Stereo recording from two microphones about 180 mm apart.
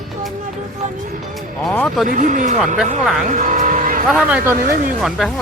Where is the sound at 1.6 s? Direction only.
5° left (ahead or behind).